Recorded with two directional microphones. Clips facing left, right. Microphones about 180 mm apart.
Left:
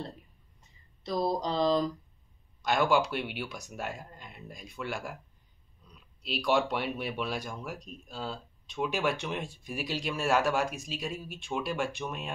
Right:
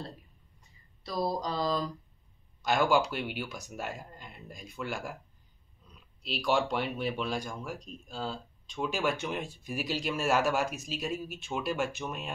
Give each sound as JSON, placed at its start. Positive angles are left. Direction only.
{"t": 1.0, "sound": "mantra", "side_deg": 20}
{"t": 2.6, "sound": "speech", "side_deg": 0}
{"t": 6.2, "sound": "speech", "side_deg": 0}